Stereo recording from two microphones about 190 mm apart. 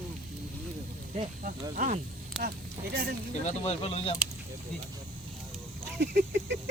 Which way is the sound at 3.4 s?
35° left (ahead or behind).